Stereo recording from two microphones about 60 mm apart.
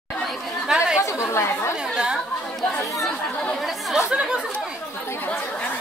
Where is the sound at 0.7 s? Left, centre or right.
Centre.